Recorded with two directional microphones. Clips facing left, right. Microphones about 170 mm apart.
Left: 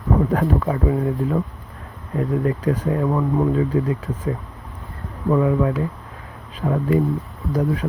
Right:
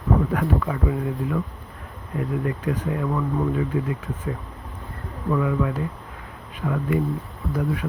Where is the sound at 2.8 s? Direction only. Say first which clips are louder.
Left 5 dB; 40° left (ahead or behind).